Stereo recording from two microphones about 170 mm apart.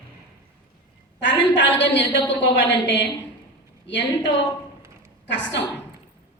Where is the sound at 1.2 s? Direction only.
90° left.